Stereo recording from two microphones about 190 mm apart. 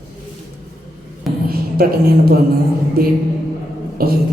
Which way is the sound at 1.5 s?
55° right (ahead or behind).